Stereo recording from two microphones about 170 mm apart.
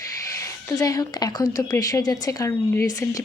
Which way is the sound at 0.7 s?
20° left (ahead or behind).